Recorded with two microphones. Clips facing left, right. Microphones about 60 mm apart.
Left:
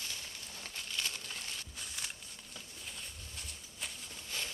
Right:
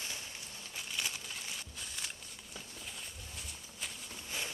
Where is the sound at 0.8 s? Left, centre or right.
Centre.